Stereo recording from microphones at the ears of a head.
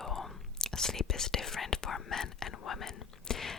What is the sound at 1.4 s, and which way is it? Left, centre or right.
Whispering, left.